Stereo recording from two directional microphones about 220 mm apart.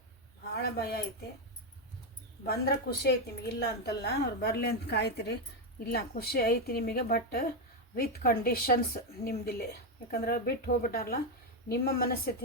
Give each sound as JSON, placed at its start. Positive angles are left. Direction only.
{"t": 0.5, "sound": "a woman's voice", "side_deg": 45}
{"t": 2.5, "sound": "a woman's voice", "side_deg": 45}